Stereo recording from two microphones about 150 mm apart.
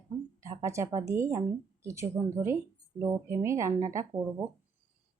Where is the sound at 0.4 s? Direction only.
20° right (ahead or behind).